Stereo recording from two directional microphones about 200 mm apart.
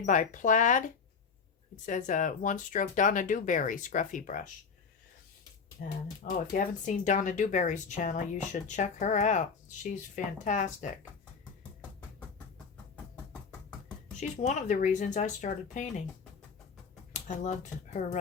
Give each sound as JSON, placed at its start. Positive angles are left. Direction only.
{"t": 0.0, "sound": "speech", "side_deg": 40}
{"t": 1.9, "sound": "speech", "side_deg": 40}
{"t": 5.8, "sound": "speech", "side_deg": 50}
{"t": 14.2, "sound": "speech", "side_deg": 35}
{"t": 17.1, "sound": "speech", "side_deg": 35}